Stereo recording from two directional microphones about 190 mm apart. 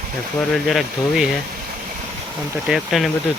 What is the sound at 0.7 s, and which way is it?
Speech, centre (ahead or behind).